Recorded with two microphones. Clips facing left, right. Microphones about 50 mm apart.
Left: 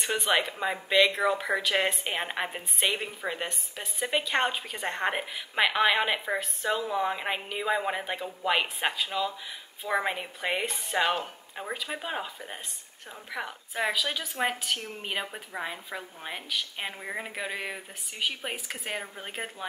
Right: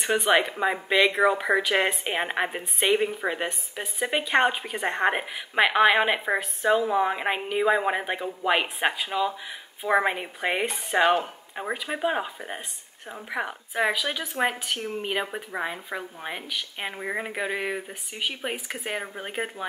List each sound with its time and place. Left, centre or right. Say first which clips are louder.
0.0 s a woman's voice: right 5 dB; centre